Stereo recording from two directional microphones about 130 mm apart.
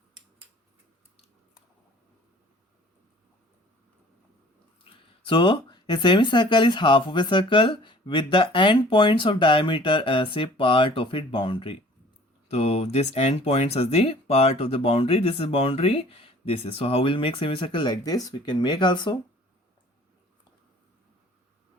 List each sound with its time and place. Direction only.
4.8 s speech: 40° left (ahead or behind)
12.5 s speech: 55° left (ahead or behind); by 19.2 s 35° left (ahead or behind)